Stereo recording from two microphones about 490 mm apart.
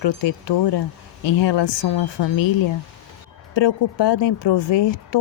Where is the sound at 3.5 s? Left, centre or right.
Left.